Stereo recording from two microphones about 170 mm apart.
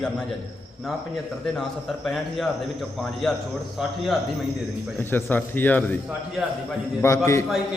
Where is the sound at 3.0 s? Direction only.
Centre (ahead or behind).